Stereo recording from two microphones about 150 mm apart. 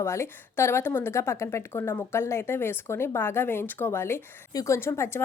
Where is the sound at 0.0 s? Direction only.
15° left (ahead or behind).